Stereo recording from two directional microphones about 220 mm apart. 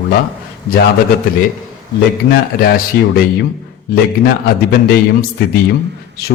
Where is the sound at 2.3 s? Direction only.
45° left (ahead or behind).